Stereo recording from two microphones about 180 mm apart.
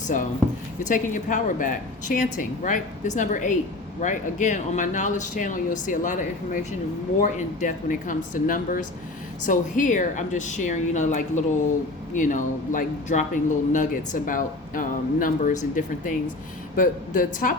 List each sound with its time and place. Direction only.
0.9 s speech: 45° left (ahead or behind)